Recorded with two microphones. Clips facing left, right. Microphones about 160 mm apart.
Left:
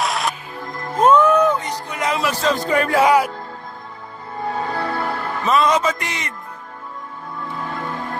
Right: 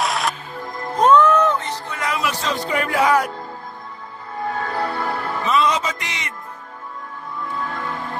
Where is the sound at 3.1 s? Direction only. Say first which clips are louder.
Left 2 dB; 5° left (ahead or behind).